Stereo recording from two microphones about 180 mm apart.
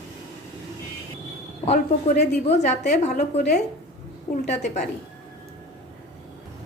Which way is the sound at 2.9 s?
40° left (ahead or behind).